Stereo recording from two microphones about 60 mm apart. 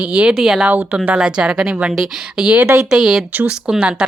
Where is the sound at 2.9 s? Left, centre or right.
Centre.